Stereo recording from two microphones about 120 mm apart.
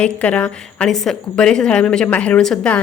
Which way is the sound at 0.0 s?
10° left (ahead or behind).